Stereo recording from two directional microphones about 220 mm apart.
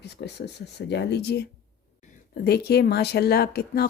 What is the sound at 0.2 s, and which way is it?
Speech, 50° left (ahead or behind).